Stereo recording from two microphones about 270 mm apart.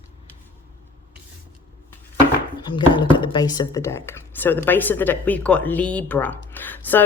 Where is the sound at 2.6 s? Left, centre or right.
Centre.